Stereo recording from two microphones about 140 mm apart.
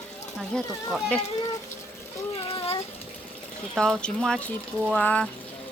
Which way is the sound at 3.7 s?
5° left (ahead or behind).